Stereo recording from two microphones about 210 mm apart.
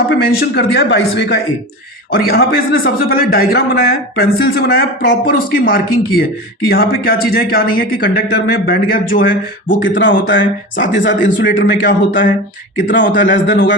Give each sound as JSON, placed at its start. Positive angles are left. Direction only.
{"t": 0.1, "sound": "a man's voice", "side_deg": 55}
{"t": 9.8, "sound": "speech", "side_deg": 60}
{"t": 11.7, "sound": "a man's voice", "side_deg": 40}
{"t": 12.9, "sound": "speech", "side_deg": 60}